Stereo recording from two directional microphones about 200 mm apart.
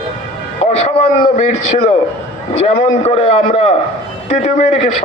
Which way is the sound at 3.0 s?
30° left (ahead or behind).